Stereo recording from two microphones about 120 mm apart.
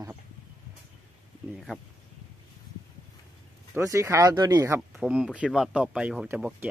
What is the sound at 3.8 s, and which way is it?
Speech, 25° right (ahead or behind).